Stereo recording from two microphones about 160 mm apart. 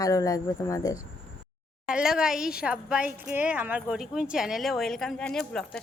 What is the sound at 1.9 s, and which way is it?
A woman's voice, 5° right (ahead or behind).